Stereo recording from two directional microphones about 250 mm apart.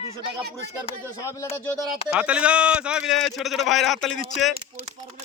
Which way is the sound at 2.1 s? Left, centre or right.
Centre.